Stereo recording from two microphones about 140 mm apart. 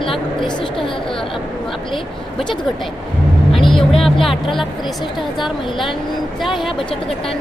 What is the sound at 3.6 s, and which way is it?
Vehicle, centre (ahead or behind).